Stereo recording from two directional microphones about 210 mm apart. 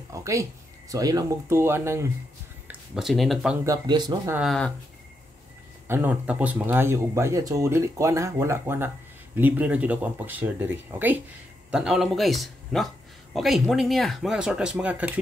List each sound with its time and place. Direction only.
0.1 s speech: 15° right (ahead or behind)
3.6 s speech: 20° right (ahead or behind)
4.4 s speech: centre (ahead or behind)
5.9 s speech: 10° right (ahead or behind)